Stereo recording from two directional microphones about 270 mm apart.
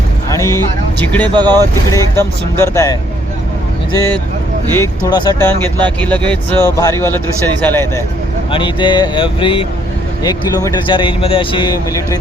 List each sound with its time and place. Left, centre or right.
0.9 s speech: centre
1.3 s speech: centre
1.9 s speech: centre